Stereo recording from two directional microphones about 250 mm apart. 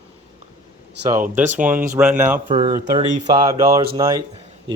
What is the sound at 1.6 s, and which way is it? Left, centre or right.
Speech, centre.